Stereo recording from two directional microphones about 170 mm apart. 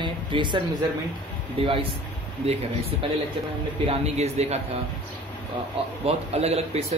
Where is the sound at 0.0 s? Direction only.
30° right (ahead or behind).